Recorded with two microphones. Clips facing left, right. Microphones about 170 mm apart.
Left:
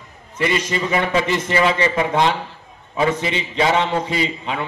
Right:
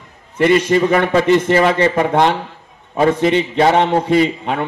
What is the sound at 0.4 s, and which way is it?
A man's voice, 60° right (ahead or behind).